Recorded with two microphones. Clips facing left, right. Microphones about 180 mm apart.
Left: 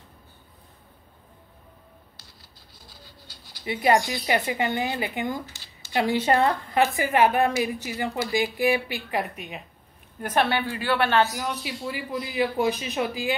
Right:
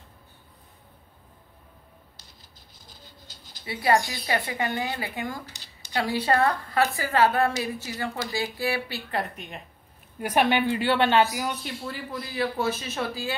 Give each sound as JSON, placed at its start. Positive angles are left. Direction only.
{"t": 2.9, "sound": "bird", "side_deg": -20}
{"t": 3.6, "sound": "speech", "side_deg": 20}
{"t": 10.2, "sound": "speech", "side_deg": -15}
{"t": 11.4, "sound": "speech", "side_deg": 0}
{"t": 11.8, "sound": "speech", "side_deg": 10}